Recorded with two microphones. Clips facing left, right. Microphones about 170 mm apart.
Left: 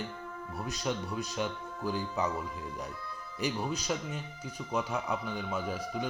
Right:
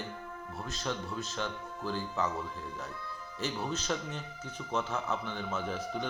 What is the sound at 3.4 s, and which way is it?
Speech, 10° left (ahead or behind).